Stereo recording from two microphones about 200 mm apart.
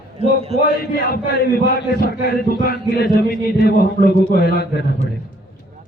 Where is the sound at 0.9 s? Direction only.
50° left (ahead or behind).